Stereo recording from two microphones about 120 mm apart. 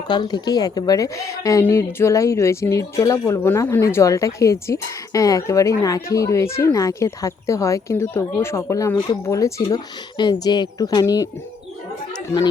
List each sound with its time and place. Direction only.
0.1 s a woman's voice: 35° left (ahead or behind)
10.2 s speech: 35° left (ahead or behind)